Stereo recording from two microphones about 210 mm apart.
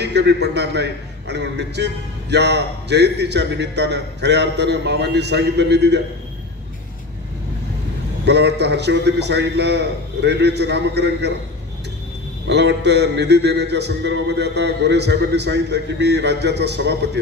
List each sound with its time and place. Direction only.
0.0 s a man's voice: 55° right (ahead or behind)
8.3 s a man's voice: 55° right (ahead or behind)
12.4 s a man's voice: 55° right (ahead or behind)